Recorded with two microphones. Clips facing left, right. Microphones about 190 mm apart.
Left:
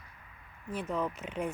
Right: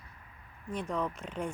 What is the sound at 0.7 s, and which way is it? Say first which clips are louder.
Speech: even; 5° left (ahead or behind).